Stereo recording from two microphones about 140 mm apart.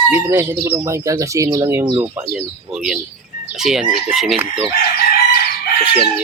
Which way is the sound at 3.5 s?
5° right (ahead or behind).